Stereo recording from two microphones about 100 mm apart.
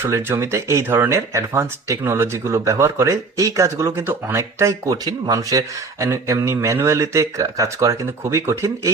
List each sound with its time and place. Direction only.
0.0 s speech: 25° right (ahead or behind)
4.9 s speech: 45° right (ahead or behind)